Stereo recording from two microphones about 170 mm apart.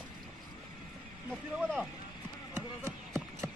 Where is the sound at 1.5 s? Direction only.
5° right (ahead or behind).